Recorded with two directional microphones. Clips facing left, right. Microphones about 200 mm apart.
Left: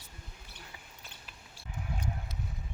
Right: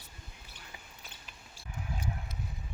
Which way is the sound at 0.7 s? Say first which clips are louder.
Right 1 dB; 20° right (ahead or behind).